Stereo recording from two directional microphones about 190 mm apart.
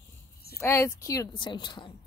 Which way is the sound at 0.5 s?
15° left (ahead or behind).